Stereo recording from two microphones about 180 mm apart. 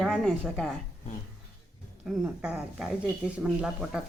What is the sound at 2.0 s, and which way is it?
Speech, 5° right (ahead or behind).